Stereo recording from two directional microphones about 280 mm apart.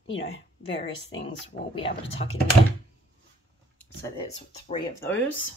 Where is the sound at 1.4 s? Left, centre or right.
Centre.